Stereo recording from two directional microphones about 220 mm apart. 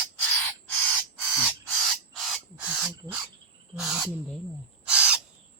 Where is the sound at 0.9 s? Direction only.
5° right (ahead or behind).